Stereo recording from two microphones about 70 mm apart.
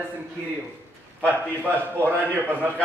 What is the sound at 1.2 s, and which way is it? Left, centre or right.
Speech, right.